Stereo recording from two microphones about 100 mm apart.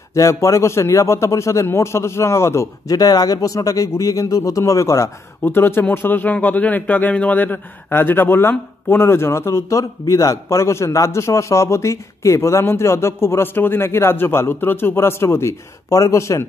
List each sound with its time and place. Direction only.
0.1 s a man's voice: 30° left (ahead or behind)